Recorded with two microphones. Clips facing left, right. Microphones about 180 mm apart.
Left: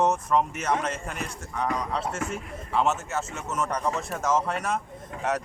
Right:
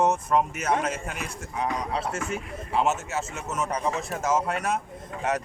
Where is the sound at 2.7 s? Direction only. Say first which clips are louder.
Even; 5° right (ahead or behind).